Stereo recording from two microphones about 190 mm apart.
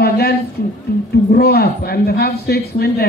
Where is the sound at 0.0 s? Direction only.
55° left (ahead or behind).